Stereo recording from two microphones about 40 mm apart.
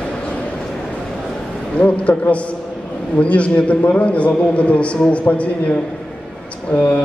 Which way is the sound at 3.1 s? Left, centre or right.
Left.